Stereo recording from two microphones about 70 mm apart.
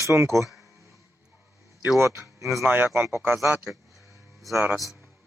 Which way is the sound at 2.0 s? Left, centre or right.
Right.